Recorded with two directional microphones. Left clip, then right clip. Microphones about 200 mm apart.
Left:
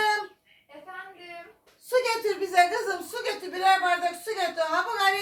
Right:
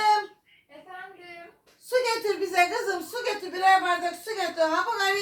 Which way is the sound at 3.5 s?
5° right (ahead or behind).